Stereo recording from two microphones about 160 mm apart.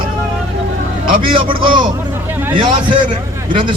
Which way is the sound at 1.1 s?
35° right (ahead or behind).